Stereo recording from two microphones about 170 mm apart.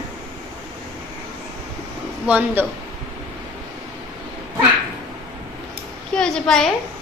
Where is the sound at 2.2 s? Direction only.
10° right (ahead or behind).